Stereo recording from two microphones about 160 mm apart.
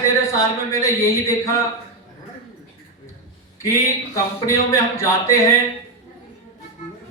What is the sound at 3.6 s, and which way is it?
Speech, 20° left (ahead or behind).